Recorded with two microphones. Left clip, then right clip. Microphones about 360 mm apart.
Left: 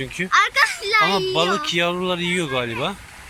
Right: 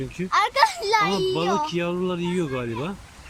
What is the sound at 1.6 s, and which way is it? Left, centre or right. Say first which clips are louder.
Speech: left 5 dB; centre.